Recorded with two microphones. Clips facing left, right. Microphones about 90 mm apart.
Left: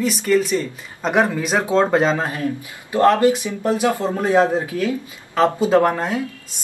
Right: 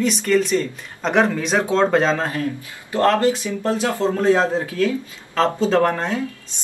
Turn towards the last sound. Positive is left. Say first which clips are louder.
# left 2 dB
turn(degrees=15)  # may be behind; listen again after turning